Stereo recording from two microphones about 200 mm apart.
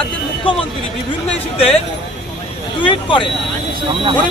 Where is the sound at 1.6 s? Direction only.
30° left (ahead or behind).